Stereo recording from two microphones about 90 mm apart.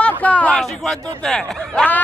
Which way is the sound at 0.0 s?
15° left (ahead or behind).